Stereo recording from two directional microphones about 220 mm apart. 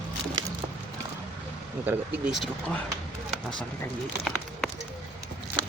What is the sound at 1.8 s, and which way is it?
Speech, 5° right (ahead or behind).